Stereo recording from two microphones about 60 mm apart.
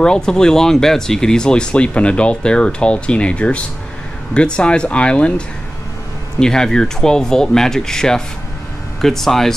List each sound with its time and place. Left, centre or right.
0.0 s speech: centre
6.4 s speech: centre